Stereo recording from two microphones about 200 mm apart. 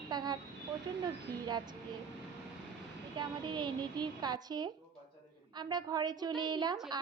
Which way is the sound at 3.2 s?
20° right (ahead or behind).